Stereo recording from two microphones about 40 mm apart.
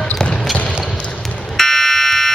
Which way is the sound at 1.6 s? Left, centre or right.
Centre.